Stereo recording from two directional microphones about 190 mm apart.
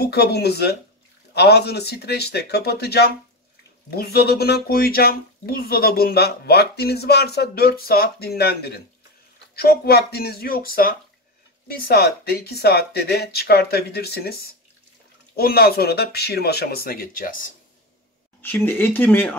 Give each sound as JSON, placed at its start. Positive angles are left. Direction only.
{"t": 0.0, "sound": "speech", "side_deg": 60}
{"t": 18.4, "sound": "speech", "side_deg": 10}